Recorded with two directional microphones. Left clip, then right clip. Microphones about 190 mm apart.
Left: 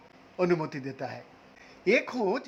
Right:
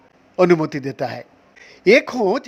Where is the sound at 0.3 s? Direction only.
45° right (ahead or behind).